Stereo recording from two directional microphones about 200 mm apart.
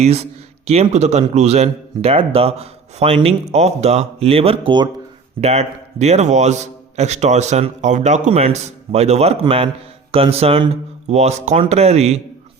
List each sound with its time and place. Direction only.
0.0 s a man's voice: 30° right (ahead or behind)